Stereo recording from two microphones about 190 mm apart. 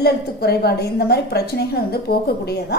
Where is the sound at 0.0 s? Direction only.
55° left (ahead or behind).